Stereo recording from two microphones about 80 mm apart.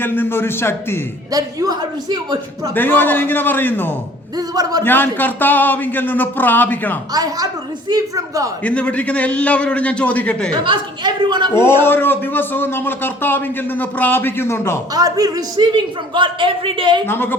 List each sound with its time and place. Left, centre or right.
0.0 s a man's voice: left
1.3 s a man's voice: right
2.7 s a man's voice: left
4.4 s a man's voice: right
4.8 s a man's voice: left
7.1 s a man's voice: right
8.6 s a man's voice: centre
10.5 s a man's voice: right
11.8 s a man's voice: left
14.9 s a man's voice: right
17.1 s a man's voice: left